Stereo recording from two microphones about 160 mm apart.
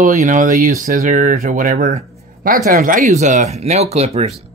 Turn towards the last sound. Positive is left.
turn(degrees=-40)  # may be behind; listen again after turning